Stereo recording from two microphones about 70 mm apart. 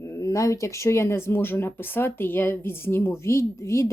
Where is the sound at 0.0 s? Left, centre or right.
Left.